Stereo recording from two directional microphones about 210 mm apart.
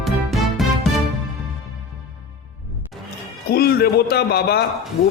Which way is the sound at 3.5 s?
50° left (ahead or behind).